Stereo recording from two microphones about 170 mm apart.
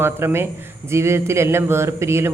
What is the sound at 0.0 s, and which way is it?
Speech, 15° right (ahead or behind).